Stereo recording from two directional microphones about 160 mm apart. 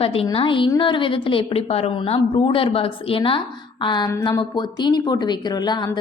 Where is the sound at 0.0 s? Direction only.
35° left (ahead or behind).